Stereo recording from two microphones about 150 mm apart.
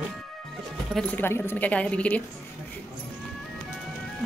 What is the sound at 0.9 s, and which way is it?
Speech, 10° left (ahead or behind).